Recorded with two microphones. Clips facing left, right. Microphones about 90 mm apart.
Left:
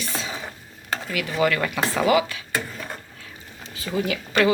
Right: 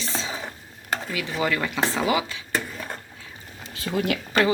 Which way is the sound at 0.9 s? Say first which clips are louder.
Left 1 dB; 10° right (ahead or behind).